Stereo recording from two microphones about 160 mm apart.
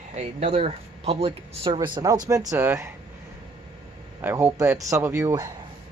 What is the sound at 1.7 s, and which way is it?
Speech, 25° right (ahead or behind).